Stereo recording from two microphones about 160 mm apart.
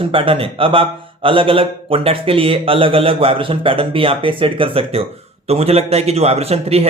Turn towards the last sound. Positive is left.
turn(degrees=-40)  # may be behind; listen again after turning